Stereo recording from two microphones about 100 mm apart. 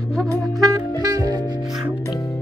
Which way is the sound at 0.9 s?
35° right (ahead or behind).